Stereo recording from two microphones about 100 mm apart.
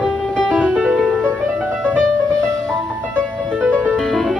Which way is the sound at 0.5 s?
15° right (ahead or behind).